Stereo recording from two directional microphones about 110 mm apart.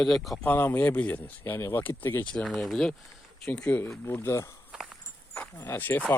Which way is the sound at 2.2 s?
10° left (ahead or behind).